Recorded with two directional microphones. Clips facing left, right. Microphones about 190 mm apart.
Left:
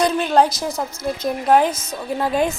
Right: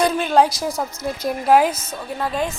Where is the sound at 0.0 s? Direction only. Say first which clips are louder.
Even; centre (ahead or behind).